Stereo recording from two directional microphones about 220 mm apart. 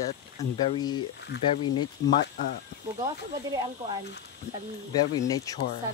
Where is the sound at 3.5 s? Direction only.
20° right (ahead or behind).